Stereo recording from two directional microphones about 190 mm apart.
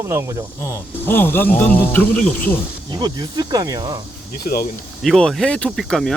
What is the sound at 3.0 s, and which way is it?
Speech, 20° right (ahead or behind).